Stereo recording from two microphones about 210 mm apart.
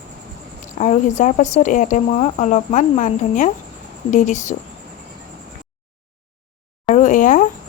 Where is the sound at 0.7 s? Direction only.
35° left (ahead or behind).